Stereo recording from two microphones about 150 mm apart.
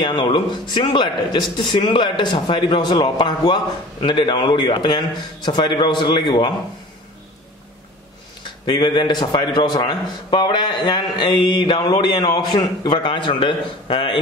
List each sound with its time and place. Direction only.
0.0 s a man's voice: 35° left (ahead or behind)
8.6 s a man's voice: 30° left (ahead or behind)